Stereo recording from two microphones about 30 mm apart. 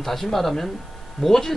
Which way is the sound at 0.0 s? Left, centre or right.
Centre.